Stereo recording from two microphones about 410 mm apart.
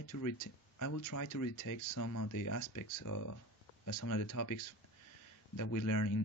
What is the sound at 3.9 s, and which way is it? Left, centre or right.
Speech, left.